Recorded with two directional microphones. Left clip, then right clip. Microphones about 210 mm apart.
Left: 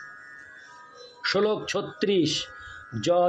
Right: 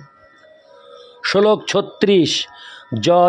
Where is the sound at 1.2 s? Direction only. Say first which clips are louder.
Right 10 dB; 50° right (ahead or behind).